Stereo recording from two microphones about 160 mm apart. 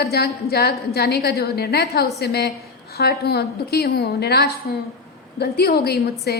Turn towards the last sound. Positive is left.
turn(degrees=85)